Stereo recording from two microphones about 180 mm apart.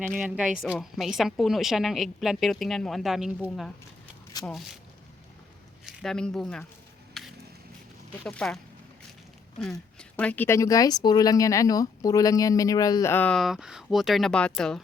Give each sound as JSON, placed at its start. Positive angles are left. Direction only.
{"t": 0.1, "sound": "a woman's voice", "side_deg": 0}
{"t": 5.8, "sound": "speech", "side_deg": 0}
{"t": 7.1, "sound": "a sound", "side_deg": 0}
{"t": 8.2, "sound": "a woman's voice", "side_deg": 5}
{"t": 10.0, "sound": "a woman's voice", "side_deg": 5}